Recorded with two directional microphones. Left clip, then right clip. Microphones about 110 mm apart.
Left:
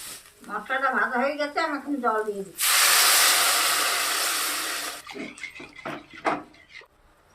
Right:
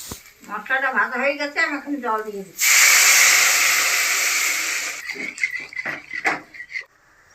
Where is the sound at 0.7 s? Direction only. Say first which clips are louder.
Right 4 dB; 25° left (ahead or behind).